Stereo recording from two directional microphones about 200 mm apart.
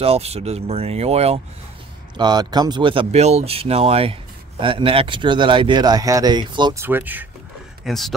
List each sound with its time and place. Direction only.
0.0 s speech: 30° right (ahead or behind)
2.1 s speech: 20° right (ahead or behind); by 8.1 s centre (ahead or behind)